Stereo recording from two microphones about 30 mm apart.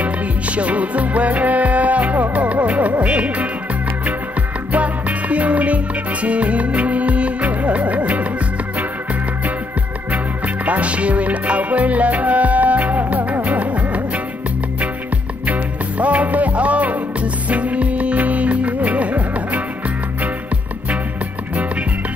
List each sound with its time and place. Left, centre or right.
0.0 s music: right
4.7 s music: right
10.1 s music: right
15.4 s music: right